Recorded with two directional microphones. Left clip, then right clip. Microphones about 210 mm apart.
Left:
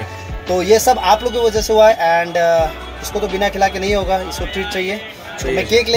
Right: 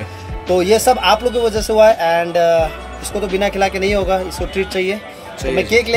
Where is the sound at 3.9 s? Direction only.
15° right (ahead or behind).